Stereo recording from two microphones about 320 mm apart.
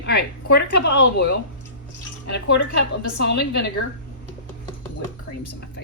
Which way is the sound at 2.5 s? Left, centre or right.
Left.